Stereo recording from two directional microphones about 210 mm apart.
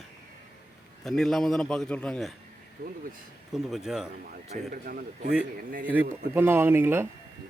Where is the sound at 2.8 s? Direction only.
40° right (ahead or behind).